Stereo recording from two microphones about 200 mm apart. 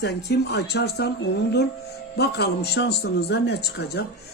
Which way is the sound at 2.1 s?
55° left (ahead or behind).